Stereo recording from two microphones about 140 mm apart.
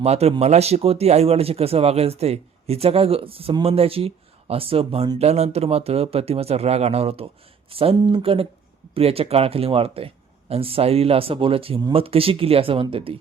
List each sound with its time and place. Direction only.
0.0 s speech: 50° right (ahead or behind)